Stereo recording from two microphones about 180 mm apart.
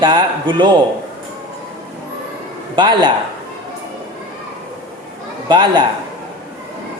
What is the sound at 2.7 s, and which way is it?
Speech, 25° right (ahead or behind).